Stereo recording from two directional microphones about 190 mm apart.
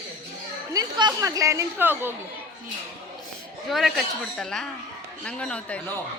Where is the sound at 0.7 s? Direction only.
20° right (ahead or behind).